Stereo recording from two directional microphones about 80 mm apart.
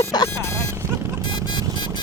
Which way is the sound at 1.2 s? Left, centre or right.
Left.